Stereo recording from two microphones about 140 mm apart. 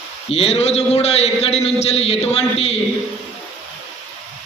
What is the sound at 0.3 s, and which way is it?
A man's voice, 45° left (ahead or behind).